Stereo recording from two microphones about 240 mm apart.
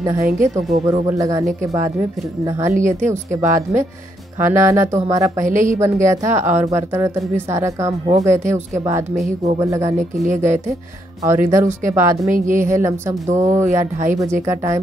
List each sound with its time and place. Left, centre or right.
0.0 s speech: centre
5.4 s a woman's voice: right
5.8 s speech: centre
12.4 s a woman's voice: right
12.7 s speech: centre